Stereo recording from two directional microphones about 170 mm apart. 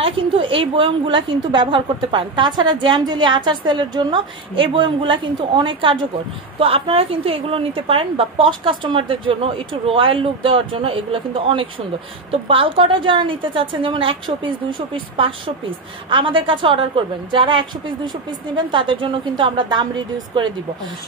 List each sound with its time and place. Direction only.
0.0 s a woman's voice: 30° right (ahead or behind)